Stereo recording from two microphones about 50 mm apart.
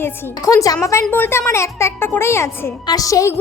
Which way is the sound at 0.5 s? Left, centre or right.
Left.